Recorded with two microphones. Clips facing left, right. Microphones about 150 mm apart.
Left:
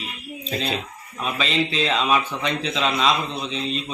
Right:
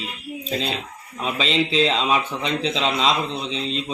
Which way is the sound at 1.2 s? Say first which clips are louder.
Right 1 dB; 25° right (ahead or behind).